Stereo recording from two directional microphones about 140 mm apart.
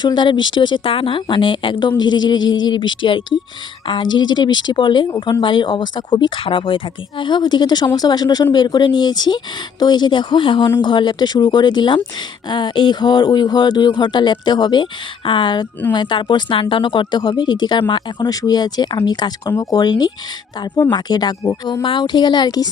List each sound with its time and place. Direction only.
0.0 s speech: 35° left (ahead or behind)